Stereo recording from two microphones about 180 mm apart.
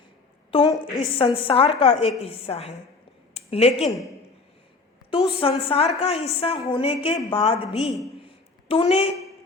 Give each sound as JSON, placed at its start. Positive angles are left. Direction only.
{"t": 0.5, "sound": "a woman's voice", "side_deg": 25}
{"t": 3.8, "sound": "a man's voice", "side_deg": 0}
{"t": 5.1, "sound": "a woman's voice", "side_deg": 30}
{"t": 8.2, "sound": "a sound", "side_deg": 30}